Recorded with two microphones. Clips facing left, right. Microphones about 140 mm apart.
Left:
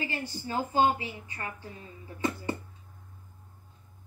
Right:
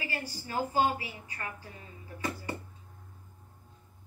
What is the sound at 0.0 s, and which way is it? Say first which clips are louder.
A woman's voice: left 3 dB; 25° left (ahead or behind).